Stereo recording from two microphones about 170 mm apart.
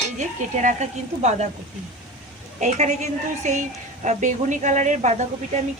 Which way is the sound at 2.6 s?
45° right (ahead or behind).